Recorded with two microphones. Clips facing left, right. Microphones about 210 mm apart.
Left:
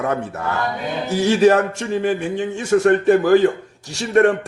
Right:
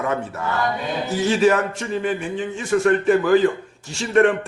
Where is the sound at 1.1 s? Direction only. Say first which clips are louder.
Left 3 dB; 70° left (ahead or behind).